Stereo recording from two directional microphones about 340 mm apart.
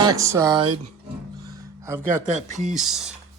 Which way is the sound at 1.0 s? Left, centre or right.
Centre.